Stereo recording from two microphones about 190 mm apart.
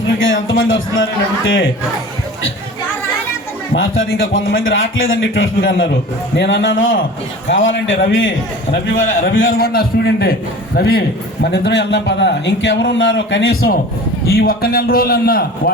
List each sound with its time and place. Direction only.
0.2 s a man's voice: 90° left
3.8 s a man's voice: 90° left
6.3 s a man's voice: 75° left (ahead or behind)
9.3 s a man's voice: 90° left
9.6 s a man's voice: 55° left (ahead or behind); by 13.7 s 90° left
14.3 s a man's voice: 55° left (ahead or behind)